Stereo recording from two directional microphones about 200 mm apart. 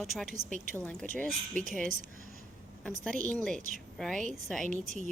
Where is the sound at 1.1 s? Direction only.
40° right (ahead or behind).